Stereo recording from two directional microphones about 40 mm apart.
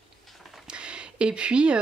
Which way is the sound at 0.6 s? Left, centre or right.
Right.